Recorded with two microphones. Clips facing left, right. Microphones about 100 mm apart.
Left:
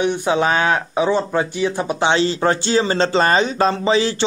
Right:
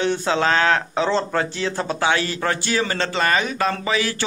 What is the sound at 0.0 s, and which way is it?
Speech, 15° left (ahead or behind).